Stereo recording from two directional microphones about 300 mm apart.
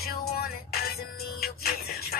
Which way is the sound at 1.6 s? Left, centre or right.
Left.